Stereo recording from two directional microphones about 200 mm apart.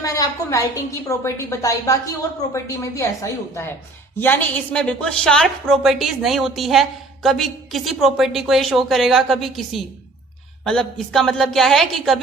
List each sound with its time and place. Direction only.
0.0 s a woman's voice: 15° left (ahead or behind); by 12.2 s centre (ahead or behind)